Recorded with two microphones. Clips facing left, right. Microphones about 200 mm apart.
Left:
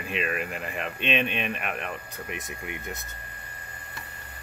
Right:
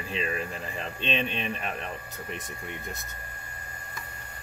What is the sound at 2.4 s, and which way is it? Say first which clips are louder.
Speech: left 2 dB; 5° left (ahead or behind).